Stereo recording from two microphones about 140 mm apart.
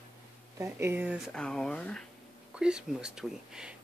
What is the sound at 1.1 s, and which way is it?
Speech, centre (ahead or behind).